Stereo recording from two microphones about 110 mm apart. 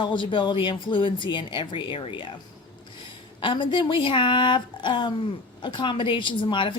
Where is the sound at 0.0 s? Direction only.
45° left (ahead or behind).